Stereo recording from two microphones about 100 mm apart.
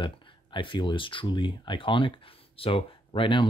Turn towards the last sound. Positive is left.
turn(degrees=55)  # may be behind; listen again after turning